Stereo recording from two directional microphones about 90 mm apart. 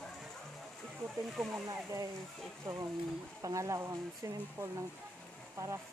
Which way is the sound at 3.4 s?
35° right (ahead or behind).